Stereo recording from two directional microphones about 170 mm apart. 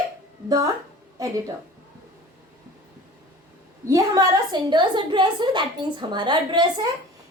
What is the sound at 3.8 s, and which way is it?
A woman's voice, 20° right (ahead or behind).